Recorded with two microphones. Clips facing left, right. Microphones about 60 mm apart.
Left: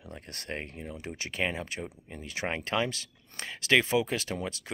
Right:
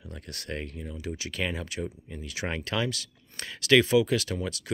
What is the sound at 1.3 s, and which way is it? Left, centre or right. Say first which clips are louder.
Speech: left 2 dB; left.